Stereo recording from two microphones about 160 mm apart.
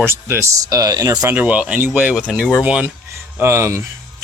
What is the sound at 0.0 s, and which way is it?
Speech, 15° right (ahead or behind).